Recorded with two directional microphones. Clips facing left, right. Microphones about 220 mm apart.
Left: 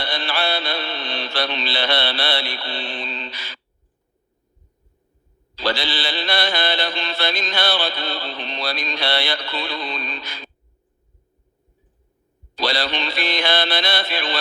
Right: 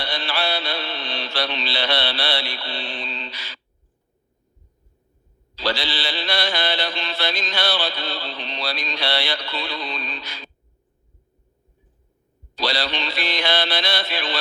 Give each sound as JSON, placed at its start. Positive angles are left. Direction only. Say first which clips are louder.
{"t": 0.0, "sound": "mantra", "louder": "left 2 dB", "side_deg": 55}
{"t": 5.5, "sound": "mantra", "louder": "left 2 dB", "side_deg": 55}
{"t": 12.5, "sound": "mantra", "louder": "left 2 dB", "side_deg": 55}